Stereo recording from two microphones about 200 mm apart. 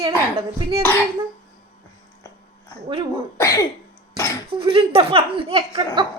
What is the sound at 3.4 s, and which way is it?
Speech, 15° left (ahead or behind).